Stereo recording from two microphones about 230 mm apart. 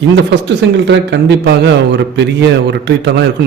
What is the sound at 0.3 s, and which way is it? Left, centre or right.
A man's voice, right.